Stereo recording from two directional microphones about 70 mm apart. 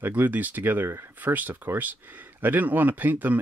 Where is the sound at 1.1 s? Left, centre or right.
Right.